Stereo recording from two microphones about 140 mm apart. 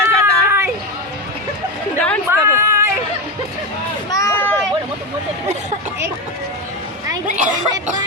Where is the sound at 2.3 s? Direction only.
20° right (ahead or behind).